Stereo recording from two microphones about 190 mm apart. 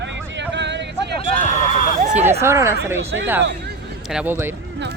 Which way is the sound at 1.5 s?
40° left (ahead or behind).